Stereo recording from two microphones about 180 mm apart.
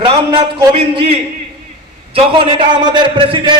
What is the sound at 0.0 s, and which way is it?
A man's voice, 25° right (ahead or behind).